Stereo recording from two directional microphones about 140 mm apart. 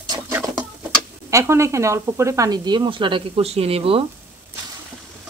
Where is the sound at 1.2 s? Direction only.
20° right (ahead or behind); by 4.0 s 45° right (ahead or behind).